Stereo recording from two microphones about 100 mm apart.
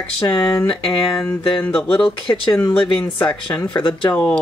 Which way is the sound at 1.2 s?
15° left (ahead or behind).